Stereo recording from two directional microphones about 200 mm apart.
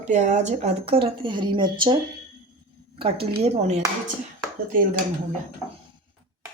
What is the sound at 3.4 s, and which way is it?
Speech, 35° right (ahead or behind).